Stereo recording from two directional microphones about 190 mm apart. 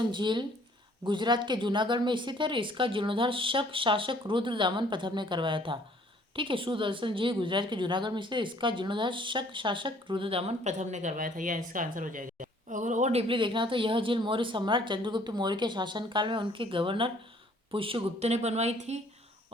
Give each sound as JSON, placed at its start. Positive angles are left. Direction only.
{"t": 0.1, "sound": "a woman's voice", "side_deg": -25}